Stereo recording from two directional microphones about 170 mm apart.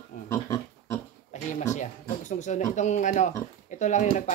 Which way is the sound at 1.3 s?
45° left (ahead or behind).